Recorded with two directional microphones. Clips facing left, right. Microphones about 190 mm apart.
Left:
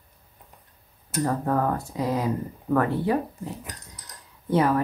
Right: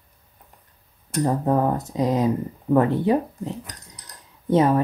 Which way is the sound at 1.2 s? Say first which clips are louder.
Right 4 dB; 20° right (ahead or behind).